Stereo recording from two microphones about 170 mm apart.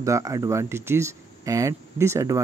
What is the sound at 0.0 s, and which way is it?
Speech, 20° right (ahead or behind).